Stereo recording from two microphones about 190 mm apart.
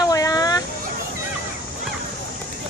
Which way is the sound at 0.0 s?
20° left (ahead or behind).